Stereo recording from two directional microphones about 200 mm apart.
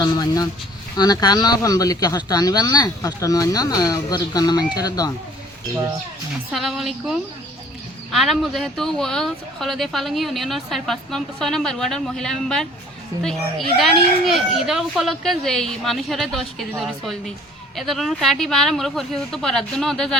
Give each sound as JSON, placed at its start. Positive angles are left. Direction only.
{"t": 0.0, "sound": "speech", "side_deg": 20}
{"t": 6.5, "sound": "speech", "side_deg": 0}